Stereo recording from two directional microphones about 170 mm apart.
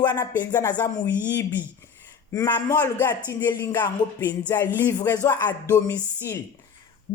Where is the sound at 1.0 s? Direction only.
90° left.